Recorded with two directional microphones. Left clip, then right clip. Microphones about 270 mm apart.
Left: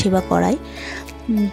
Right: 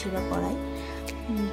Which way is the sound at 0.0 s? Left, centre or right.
Left.